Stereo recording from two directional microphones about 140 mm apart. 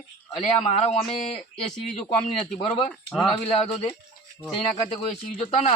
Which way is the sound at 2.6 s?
40° left (ahead or behind).